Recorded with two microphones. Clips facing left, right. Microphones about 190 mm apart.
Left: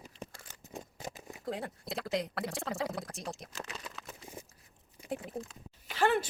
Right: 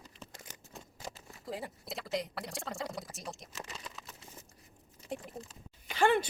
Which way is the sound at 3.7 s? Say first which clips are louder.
Left 2 dB; centre (ahead or behind).